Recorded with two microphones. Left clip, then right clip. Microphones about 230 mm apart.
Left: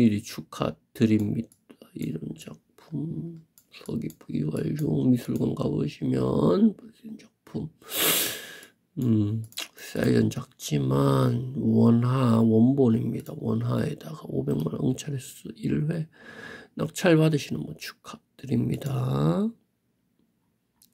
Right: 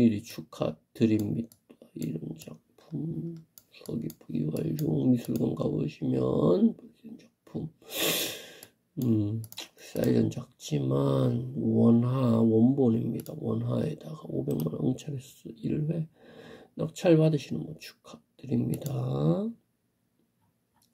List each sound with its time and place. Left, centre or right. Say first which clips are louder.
0.0 s speech: left 2 dB; left